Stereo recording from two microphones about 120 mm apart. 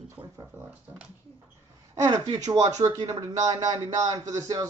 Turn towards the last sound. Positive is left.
turn(degrees=-30)  # may be behind; listen again after turning